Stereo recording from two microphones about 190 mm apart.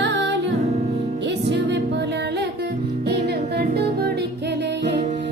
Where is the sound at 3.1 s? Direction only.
60° right (ahead or behind).